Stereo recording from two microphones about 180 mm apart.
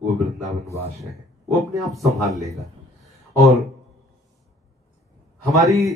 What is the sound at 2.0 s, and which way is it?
Speech, centre (ahead or behind).